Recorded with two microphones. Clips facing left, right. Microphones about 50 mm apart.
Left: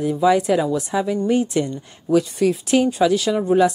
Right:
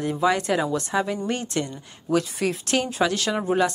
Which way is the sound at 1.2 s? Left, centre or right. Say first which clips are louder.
Left 8 dB; centre.